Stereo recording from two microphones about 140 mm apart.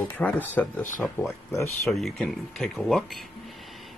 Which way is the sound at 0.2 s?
10° left (ahead or behind).